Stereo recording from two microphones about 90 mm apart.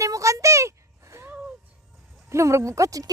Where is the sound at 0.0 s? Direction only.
35° right (ahead or behind).